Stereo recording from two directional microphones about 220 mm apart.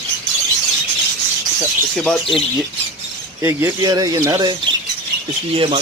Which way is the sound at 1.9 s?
5° left (ahead or behind).